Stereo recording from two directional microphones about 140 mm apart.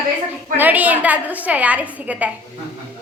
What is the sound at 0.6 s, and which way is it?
A woman's voice, 10° right (ahead or behind).